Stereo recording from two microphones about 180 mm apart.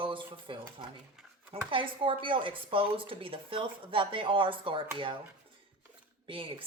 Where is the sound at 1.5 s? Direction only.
30° right (ahead or behind).